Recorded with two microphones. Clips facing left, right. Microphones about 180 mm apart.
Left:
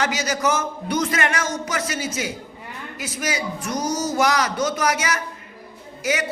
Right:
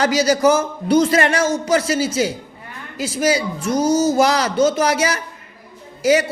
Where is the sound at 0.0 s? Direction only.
35° right (ahead or behind).